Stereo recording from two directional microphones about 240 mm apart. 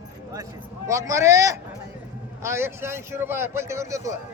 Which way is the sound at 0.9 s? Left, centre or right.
Centre.